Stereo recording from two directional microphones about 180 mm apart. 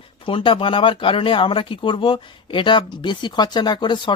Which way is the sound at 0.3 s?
30° left (ahead or behind).